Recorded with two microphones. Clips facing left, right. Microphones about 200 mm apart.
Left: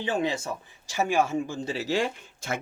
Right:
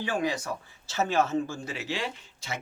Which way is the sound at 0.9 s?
15° left (ahead or behind).